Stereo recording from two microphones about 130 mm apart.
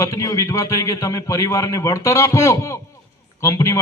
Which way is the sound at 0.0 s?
25° left (ahead or behind).